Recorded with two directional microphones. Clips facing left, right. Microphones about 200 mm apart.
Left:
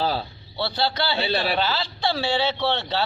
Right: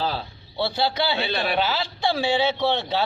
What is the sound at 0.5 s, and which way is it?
A man's voice, 10° right (ahead or behind).